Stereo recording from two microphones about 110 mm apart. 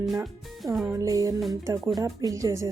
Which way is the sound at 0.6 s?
Centre (ahead or behind).